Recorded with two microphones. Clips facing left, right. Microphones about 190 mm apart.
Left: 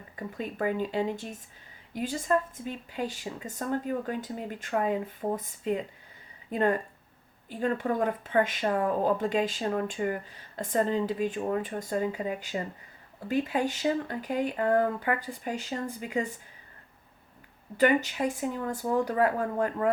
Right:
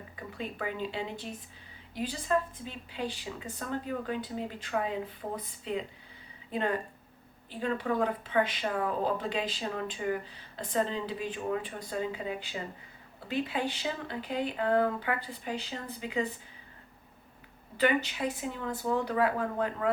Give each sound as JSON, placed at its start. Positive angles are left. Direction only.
{"t": 0.2, "sound": "speech", "side_deg": 45}
{"t": 17.7, "sound": "speech", "side_deg": 45}